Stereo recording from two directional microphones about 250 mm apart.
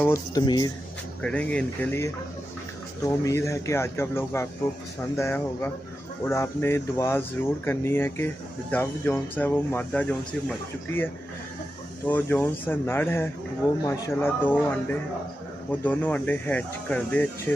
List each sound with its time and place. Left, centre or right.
0.0 s speech: centre
1.2 s speech: centre
12.1 s speech: centre